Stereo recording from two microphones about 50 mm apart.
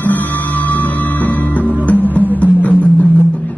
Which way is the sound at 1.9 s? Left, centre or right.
Left.